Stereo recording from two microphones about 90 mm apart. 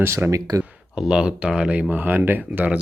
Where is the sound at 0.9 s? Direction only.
10° right (ahead or behind).